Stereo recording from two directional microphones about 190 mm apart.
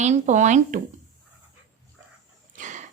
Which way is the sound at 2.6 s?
40° right (ahead or behind).